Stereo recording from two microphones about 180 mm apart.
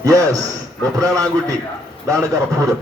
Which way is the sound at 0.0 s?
20° right (ahead or behind).